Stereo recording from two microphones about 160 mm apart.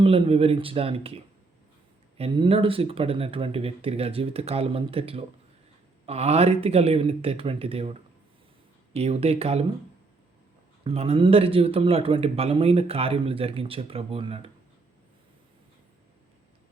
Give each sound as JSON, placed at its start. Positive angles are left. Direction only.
{"t": 0.0, "sound": "speech", "side_deg": -35}
{"t": 10.8, "sound": "speech", "side_deg": -40}